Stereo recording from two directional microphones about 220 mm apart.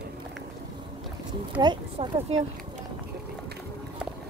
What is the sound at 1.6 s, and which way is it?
Speech, 25° right (ahead or behind).